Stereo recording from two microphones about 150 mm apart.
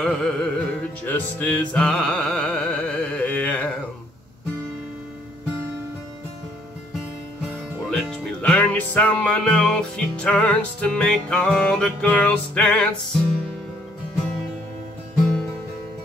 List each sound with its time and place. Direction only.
0.0 s music: 5° left (ahead or behind)
7.9 s music: centre (ahead or behind)